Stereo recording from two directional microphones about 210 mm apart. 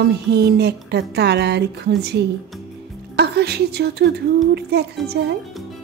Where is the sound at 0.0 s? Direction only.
50° right (ahead or behind).